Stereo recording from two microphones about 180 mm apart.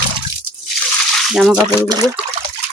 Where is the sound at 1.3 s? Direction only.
Centre (ahead or behind).